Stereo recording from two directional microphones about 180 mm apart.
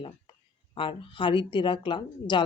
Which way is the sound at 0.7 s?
30° left (ahead or behind).